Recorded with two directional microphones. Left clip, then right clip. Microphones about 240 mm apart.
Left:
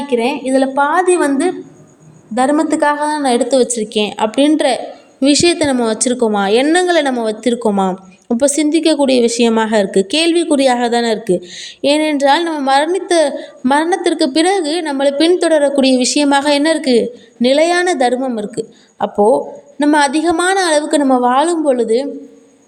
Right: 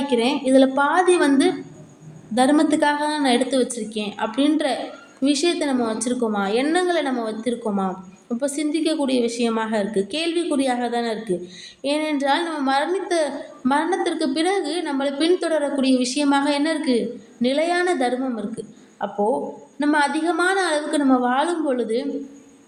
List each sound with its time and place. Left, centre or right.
0.1 s a woman's voice: centre